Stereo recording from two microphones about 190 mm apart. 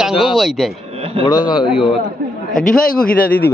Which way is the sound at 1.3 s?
25° left (ahead or behind).